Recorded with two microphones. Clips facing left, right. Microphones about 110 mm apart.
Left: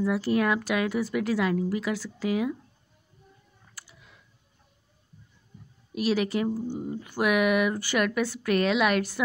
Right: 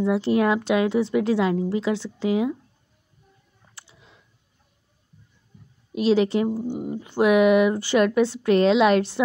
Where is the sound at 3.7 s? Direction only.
25° right (ahead or behind).